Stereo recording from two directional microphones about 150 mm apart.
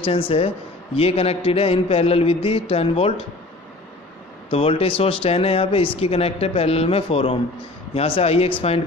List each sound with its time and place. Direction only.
0.0 s a man's voice: 40° left (ahead or behind)
4.5 s a man's voice: 40° left (ahead or behind)